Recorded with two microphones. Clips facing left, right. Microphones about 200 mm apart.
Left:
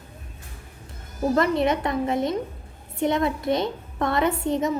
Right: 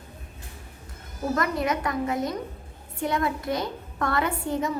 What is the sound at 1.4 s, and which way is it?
A woman's voice, 25° left (ahead or behind).